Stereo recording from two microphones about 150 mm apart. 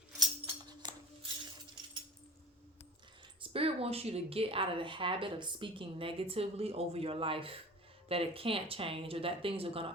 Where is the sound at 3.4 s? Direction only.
40° right (ahead or behind).